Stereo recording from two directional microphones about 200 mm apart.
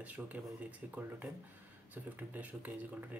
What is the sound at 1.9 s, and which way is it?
Speech, 10° right (ahead or behind).